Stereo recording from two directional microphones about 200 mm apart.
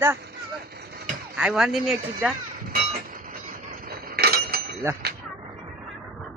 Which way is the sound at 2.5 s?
45° right (ahead or behind).